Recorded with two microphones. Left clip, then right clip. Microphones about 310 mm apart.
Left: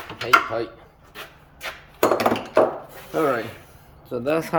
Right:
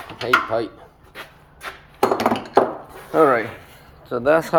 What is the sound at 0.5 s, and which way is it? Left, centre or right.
Speech, right.